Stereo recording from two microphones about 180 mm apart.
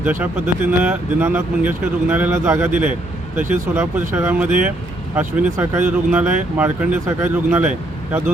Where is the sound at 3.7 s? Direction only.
15° right (ahead or behind).